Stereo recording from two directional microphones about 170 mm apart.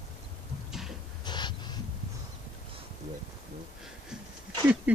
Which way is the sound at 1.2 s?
25° left (ahead or behind).